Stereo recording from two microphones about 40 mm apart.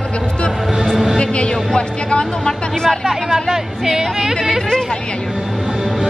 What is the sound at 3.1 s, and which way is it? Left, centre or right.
Speech, centre.